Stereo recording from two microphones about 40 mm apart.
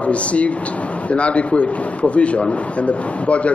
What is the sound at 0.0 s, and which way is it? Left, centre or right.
A man's voice, left.